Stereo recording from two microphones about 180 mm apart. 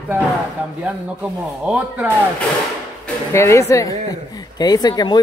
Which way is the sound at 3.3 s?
15° left (ahead or behind).